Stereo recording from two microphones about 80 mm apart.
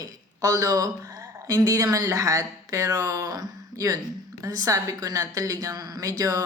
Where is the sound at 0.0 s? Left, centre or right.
Right.